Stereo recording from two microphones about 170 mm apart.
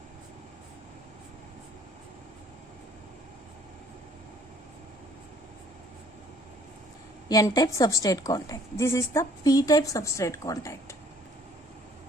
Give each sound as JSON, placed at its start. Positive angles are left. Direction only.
{"t": 7.3, "sound": "a woman's voice", "side_deg": 20}